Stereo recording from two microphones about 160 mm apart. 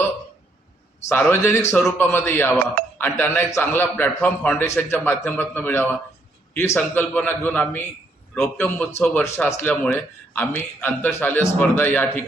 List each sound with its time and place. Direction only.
1.0 s a man's voice: 10° left (ahead or behind)